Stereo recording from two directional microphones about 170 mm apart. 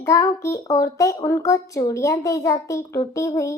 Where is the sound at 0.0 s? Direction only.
20° left (ahead or behind).